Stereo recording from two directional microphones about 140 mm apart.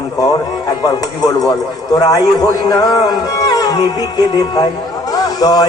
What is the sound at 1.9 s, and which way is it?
Speech, 25° left (ahead or behind).